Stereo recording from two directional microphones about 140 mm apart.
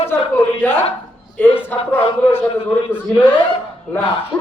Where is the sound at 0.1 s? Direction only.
15° left (ahead or behind).